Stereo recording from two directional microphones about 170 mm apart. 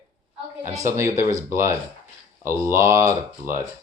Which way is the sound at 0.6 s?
20° right (ahead or behind).